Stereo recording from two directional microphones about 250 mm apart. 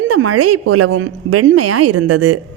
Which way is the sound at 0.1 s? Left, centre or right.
Right.